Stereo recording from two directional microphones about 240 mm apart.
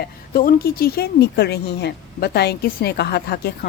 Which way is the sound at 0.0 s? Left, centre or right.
Left.